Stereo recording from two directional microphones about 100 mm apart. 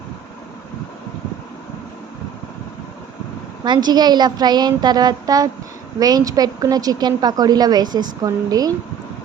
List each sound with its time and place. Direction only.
3.6 s a woman's voice: 45° right (ahead or behind)